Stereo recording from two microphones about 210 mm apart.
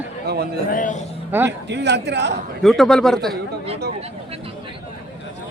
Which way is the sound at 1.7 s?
55° right (ahead or behind).